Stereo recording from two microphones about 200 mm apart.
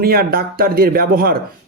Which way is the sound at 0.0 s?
50° right (ahead or behind).